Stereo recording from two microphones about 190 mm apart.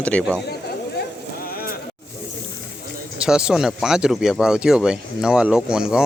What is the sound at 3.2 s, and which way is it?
Speech, 5° right (ahead or behind).